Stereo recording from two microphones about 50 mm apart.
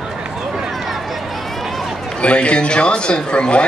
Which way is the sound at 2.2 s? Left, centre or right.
Left.